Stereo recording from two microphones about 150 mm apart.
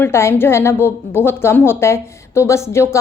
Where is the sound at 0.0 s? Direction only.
15° left (ahead or behind).